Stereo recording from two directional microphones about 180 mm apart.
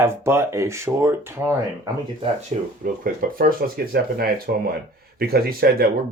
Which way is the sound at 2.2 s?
45° right (ahead or behind).